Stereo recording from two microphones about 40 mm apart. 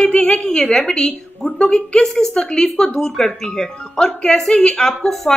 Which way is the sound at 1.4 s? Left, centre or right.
Left.